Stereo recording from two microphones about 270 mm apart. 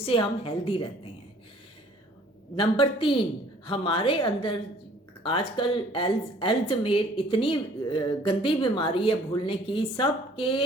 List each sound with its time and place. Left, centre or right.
0.0 s speech: centre
2.6 s speech: centre